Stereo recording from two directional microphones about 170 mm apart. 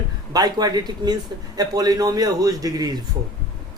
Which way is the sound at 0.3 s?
25° right (ahead or behind).